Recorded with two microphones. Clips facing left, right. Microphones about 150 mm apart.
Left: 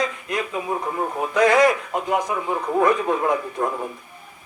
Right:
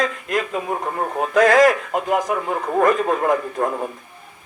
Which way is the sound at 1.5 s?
90° right.